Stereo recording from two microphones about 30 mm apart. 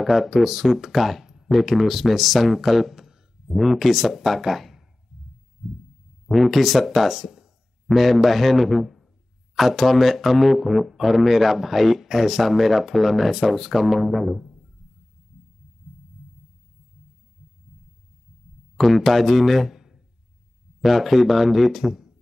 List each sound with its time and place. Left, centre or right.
0.0 s speech: centre
1.2 s a sound: centre
1.5 s speech: centre
3.0 s a sound: centre
3.6 s speech: centre
5.1 s heart sounds: right
6.3 s speech: centre
18.8 s speech: centre
20.8 s speech: centre